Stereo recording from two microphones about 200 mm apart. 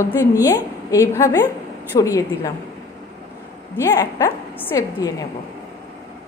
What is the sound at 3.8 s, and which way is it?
A woman's voice, 15° left (ahead or behind).